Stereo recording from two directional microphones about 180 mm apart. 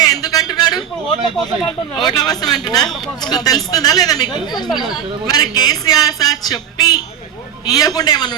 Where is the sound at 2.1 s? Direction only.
20° left (ahead or behind).